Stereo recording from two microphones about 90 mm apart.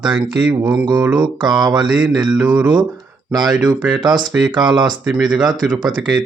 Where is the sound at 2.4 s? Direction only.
15° right (ahead or behind).